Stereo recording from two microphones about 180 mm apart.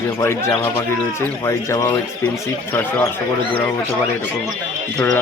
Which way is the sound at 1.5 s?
20° left (ahead or behind).